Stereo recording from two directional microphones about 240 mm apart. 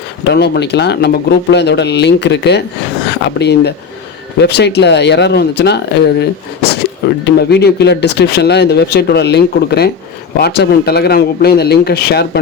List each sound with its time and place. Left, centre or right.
0.3 s speech: left